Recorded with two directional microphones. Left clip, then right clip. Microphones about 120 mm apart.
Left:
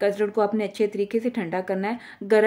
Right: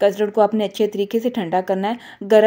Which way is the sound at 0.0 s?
35° right (ahead or behind).